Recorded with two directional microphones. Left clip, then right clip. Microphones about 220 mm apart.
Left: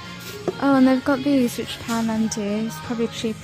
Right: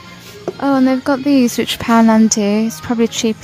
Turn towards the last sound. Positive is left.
turn(degrees=-25)  # may be behind; listen again after turning